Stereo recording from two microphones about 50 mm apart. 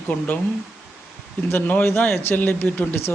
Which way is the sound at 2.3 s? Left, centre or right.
Left.